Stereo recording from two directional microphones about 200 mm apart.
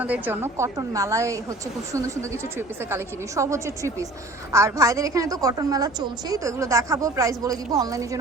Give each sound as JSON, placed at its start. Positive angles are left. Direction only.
{"t": 0.0, "sound": "a woman's voice", "side_deg": -10}